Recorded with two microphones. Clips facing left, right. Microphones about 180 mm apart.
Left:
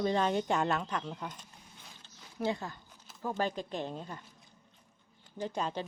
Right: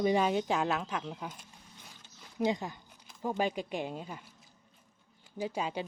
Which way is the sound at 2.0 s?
15° right (ahead or behind).